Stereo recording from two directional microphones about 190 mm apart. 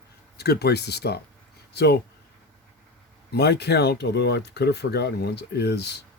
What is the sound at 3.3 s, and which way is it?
Speech, 60° left (ahead or behind).